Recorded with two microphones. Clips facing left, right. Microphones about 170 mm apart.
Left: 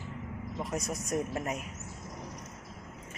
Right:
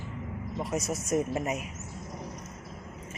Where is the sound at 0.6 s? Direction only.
Centre (ahead or behind).